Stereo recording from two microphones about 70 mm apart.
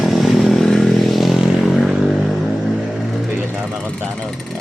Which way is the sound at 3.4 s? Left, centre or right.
Centre.